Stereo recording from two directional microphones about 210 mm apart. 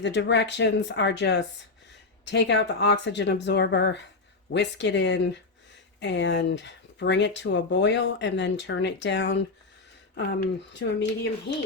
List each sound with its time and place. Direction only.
0.0 s speech: 55° left (ahead or behind)